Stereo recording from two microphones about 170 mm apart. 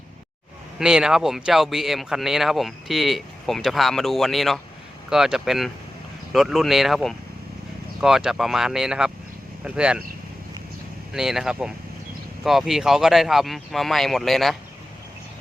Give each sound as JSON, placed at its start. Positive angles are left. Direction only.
{"t": 0.8, "sound": "speech", "side_deg": -5}
{"t": 11.1, "sound": "speech", "side_deg": -5}